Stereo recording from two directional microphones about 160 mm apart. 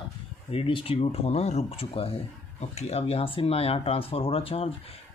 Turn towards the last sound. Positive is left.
turn(degrees=35)  # may be behind; listen again after turning